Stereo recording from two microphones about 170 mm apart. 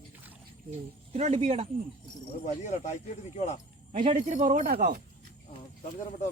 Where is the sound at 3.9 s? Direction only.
50° right (ahead or behind).